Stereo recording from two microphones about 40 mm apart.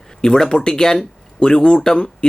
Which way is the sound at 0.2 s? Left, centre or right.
Centre.